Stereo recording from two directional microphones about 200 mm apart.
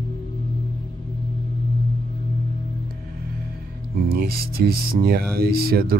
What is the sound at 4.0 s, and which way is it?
Speech, 50° right (ahead or behind).